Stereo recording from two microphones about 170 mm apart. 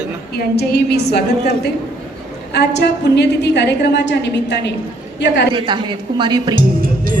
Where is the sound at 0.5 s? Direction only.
75° left (ahead or behind).